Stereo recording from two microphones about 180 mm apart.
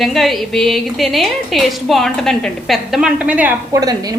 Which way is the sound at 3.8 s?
20° right (ahead or behind).